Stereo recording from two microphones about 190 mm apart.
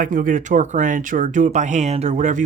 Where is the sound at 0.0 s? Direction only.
45° right (ahead or behind).